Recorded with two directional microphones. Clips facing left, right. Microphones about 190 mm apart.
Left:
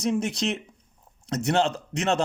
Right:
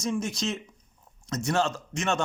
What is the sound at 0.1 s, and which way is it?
A man's voice, 35° left (ahead or behind).